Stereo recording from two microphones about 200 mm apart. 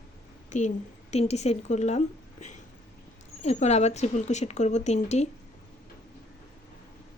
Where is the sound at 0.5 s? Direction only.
40° left (ahead or behind).